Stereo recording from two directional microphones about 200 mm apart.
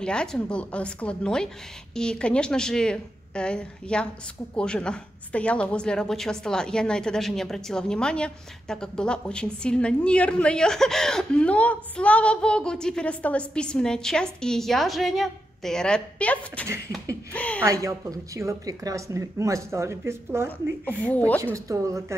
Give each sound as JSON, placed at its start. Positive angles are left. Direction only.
{"t": 0.0, "sound": "a woman's voice", "side_deg": 5}
{"t": 17.6, "sound": "speech", "side_deg": -15}
{"t": 20.8, "sound": "speech", "side_deg": 5}
{"t": 21.6, "sound": "speech", "side_deg": -15}